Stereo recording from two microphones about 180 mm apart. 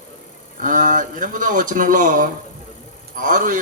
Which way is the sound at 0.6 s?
45° right (ahead or behind).